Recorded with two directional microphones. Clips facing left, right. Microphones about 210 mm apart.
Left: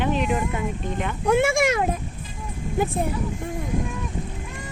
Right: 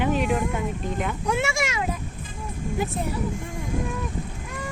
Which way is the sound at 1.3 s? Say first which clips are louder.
Left 9 dB; 55° left (ahead or behind).